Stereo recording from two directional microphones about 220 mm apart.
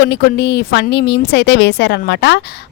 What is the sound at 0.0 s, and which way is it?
Speech, 45° left (ahead or behind).